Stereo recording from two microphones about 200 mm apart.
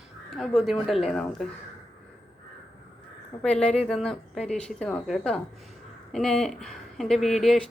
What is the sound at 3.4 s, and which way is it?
Speech, 5° left (ahead or behind).